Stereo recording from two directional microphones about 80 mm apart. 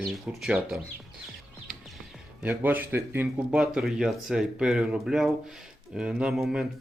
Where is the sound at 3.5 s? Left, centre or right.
Centre.